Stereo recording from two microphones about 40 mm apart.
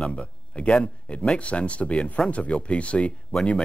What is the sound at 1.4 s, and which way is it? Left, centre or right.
Speech, left.